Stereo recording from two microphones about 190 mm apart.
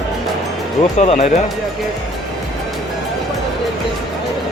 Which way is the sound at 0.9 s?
35° left (ahead or behind).